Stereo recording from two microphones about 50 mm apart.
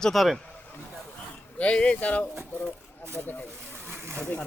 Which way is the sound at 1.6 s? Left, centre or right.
Left.